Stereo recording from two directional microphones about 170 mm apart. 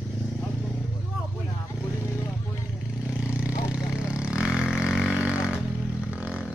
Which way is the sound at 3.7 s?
5° right (ahead or behind).